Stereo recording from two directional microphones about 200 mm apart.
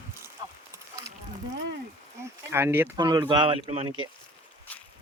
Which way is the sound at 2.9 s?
20° right (ahead or behind).